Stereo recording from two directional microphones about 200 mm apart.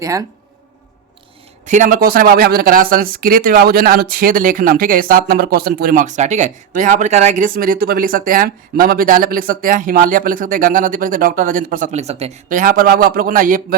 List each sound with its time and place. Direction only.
0.0 s speech: 15° right (ahead or behind)
1.6 s speech: 40° right (ahead or behind)